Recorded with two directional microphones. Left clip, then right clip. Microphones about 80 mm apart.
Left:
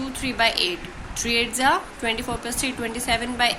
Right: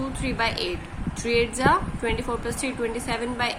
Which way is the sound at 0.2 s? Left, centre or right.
Left.